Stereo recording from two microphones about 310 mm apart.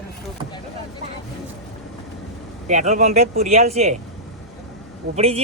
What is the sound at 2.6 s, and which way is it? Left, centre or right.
Speech, right.